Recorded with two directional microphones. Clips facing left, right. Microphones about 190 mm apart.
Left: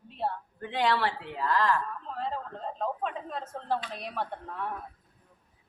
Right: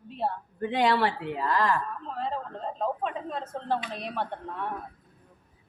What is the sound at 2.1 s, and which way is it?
Speech, centre (ahead or behind).